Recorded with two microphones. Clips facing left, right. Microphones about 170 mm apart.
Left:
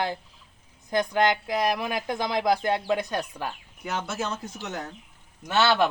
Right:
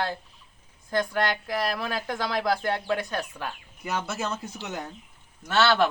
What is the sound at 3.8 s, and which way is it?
Speech, 5° right (ahead or behind).